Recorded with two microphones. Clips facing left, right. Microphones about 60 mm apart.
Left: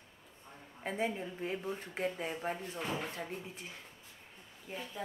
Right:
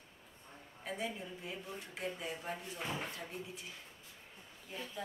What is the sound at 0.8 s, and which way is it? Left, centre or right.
Speech, left.